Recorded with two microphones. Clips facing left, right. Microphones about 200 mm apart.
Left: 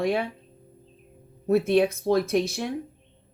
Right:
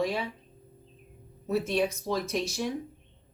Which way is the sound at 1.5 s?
60° left (ahead or behind).